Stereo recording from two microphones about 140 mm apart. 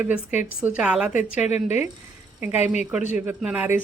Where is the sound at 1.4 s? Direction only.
55° left (ahead or behind).